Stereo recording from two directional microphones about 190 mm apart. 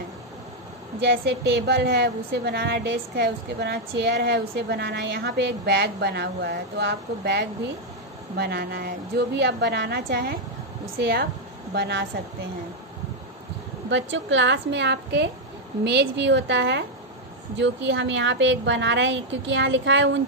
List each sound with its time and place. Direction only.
1.0 s a woman's voice: 60° right (ahead or behind)
13.8 s a woman's voice: 75° right (ahead or behind)